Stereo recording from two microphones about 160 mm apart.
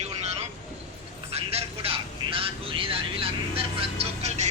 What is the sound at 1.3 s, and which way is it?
Vehicle, 40° right (ahead or behind).